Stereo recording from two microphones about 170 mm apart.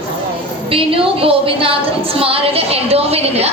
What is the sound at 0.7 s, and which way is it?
A woman's voice, 30° right (ahead or behind).